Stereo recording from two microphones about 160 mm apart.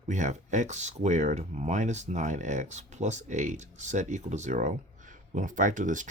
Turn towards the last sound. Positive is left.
turn(degrees=-50)  # may be behind; listen again after turning